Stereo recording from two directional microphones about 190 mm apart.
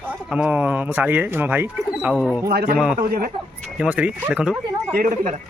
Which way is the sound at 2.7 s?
5° right (ahead or behind).